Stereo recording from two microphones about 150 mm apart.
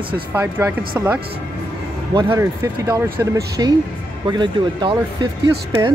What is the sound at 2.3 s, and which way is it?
Speech, 20° right (ahead or behind).